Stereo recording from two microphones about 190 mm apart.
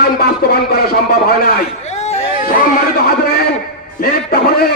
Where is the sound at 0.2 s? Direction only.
55° left (ahead or behind).